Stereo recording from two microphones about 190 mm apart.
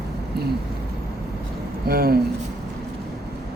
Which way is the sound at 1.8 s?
55° right (ahead or behind).